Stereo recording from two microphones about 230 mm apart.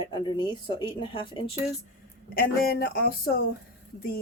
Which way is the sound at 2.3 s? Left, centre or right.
Left.